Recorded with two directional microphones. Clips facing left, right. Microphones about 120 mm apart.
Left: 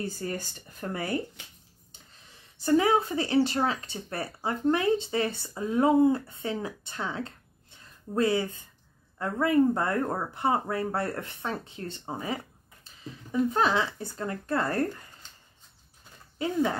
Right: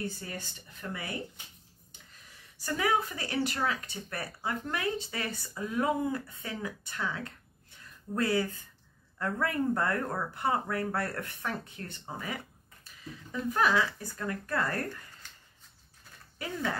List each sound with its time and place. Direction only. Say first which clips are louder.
0.0 s speech: left 5 dB; 40° left (ahead or behind)
1.9 s speech: left 1 dB; 25° left (ahead or behind)
16.0 s a sound: left 9 dB; 20° left (ahead or behind)